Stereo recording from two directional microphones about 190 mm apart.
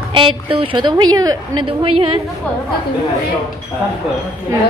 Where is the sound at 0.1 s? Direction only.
25° right (ahead or behind).